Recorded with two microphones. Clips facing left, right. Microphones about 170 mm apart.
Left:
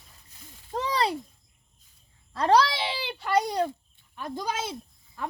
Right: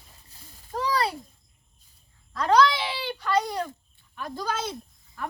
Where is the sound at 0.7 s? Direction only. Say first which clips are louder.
Right 1 dB; 20° left (ahead or behind).